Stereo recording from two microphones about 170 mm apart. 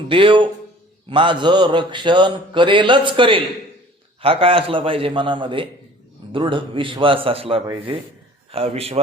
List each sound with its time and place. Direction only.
0.1 s a man's voice: 30° right (ahead or behind)
1.1 s mantra: 30° right (ahead or behind)
4.2 s a man's voice: 35° right (ahead or behind)